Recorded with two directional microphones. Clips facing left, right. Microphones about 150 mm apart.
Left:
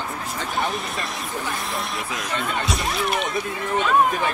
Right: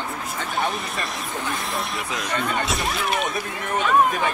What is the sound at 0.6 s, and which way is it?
Speech, centre (ahead or behind).